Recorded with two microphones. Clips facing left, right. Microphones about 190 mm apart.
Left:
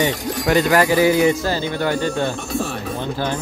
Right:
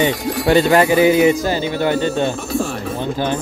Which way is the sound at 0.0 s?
25° right (ahead or behind).